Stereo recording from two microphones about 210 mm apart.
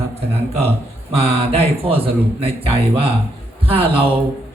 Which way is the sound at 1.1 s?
30° right (ahead or behind).